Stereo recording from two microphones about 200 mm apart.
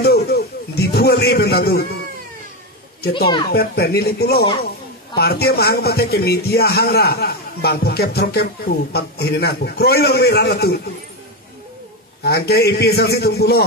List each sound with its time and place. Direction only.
0.0 s a sound: 50° left (ahead or behind)
3.0 s a child's voice: 55° left (ahead or behind)
12.2 s a man's voice: 50° left (ahead or behind)